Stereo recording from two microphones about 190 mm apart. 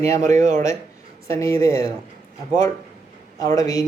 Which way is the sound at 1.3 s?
15° left (ahead or behind).